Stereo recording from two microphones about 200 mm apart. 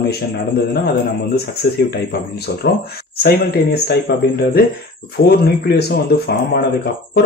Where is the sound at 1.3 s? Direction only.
50° left (ahead or behind).